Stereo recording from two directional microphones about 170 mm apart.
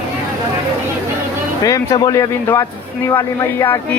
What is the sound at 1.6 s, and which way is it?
A man's voice, 20° left (ahead or behind).